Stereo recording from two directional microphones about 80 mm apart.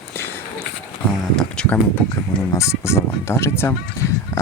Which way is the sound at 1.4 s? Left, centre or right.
Centre.